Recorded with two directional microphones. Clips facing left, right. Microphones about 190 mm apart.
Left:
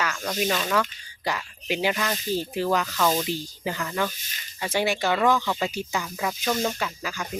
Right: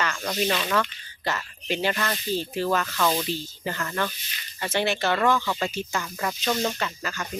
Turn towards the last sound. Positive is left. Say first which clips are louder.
# even
turn(degrees=5)  # may be behind; listen again after turning